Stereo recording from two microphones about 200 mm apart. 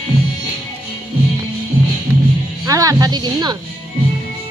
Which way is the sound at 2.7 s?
15° right (ahead or behind).